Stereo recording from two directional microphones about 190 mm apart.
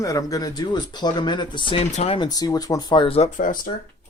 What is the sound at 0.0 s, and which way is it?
Speech, 15° left (ahead or behind).